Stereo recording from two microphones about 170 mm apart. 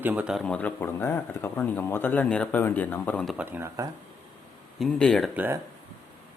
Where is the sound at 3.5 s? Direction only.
15° right (ahead or behind).